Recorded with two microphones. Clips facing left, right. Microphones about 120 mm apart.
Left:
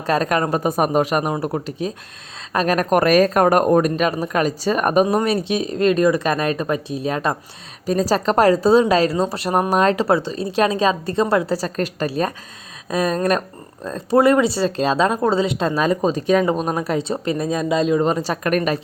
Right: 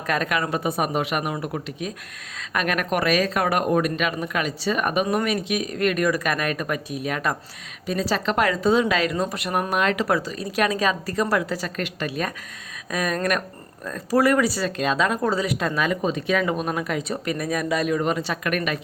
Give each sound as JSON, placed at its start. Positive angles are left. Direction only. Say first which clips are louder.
{"t": 0.0, "sound": "a woman's voice", "louder": "left 5 dB", "side_deg": 35}
{"t": 7.9, "sound": "a woman's voice", "louder": "left 6 dB", "side_deg": 40}